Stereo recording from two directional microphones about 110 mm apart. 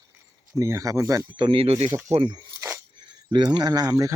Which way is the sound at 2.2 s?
40° right (ahead or behind).